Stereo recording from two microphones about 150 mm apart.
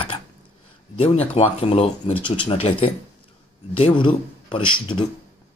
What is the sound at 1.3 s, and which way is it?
A man's voice, 40° left (ahead or behind).